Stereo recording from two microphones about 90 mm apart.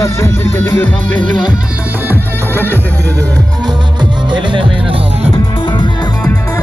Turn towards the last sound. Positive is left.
turn(degrees=60)  # may be behind; listen again after turning